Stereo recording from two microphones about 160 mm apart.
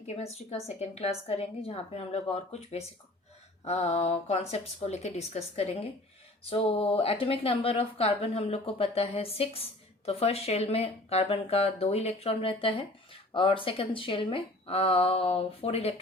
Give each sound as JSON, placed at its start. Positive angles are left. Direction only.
{"t": 0.2, "sound": "speech", "side_deg": 40}